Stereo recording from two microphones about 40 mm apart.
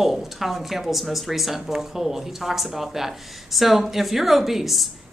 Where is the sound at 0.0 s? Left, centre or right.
Centre.